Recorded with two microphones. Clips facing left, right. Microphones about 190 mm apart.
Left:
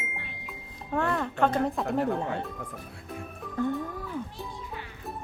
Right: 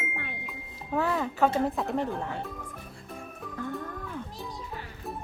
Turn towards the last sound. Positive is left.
turn(degrees=0)  # may be behind; listen again after turning